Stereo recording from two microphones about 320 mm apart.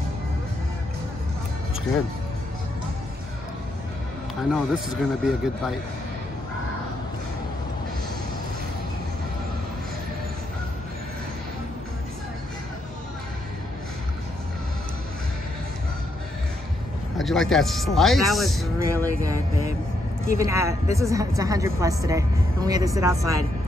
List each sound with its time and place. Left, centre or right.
4.5 s speech: centre
17.2 s speech: centre
20.3 s speech: centre